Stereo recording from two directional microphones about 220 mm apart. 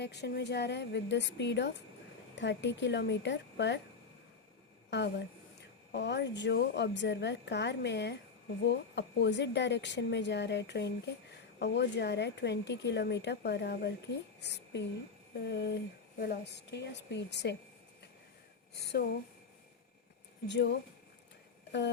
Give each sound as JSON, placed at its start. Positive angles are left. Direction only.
{"t": 0.0, "sound": "a woman's voice", "side_deg": 50}
{"t": 4.9, "sound": "a woman's voice", "side_deg": 50}
{"t": 18.7, "sound": "speech", "side_deg": 50}
{"t": 20.5, "sound": "a woman's voice", "side_deg": 50}